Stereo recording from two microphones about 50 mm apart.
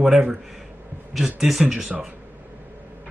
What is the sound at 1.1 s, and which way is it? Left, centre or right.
Speech, centre.